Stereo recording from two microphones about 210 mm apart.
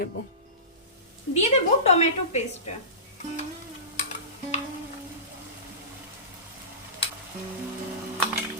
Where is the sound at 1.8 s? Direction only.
30° left (ahead or behind).